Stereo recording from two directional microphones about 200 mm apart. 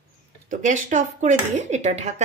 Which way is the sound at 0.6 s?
35° right (ahead or behind).